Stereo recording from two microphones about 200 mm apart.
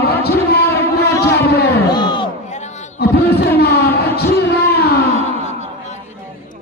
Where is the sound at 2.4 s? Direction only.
35° left (ahead or behind).